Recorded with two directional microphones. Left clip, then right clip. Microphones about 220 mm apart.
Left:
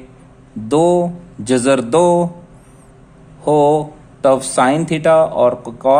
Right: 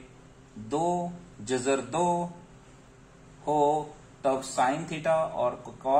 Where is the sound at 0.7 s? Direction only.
50° left (ahead or behind).